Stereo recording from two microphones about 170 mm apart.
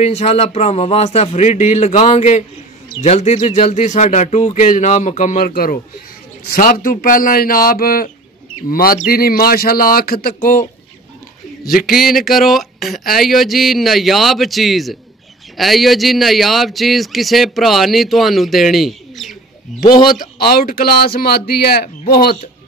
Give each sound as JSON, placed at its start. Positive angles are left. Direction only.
{"t": 0.0, "sound": "speech", "side_deg": 40}
{"t": 5.5, "sound": "speech", "side_deg": 60}
{"t": 11.9, "sound": "a man's voice", "side_deg": 0}
{"t": 19.8, "sound": "a man's voice", "side_deg": 25}
{"t": 20.1, "sound": "speech", "side_deg": 60}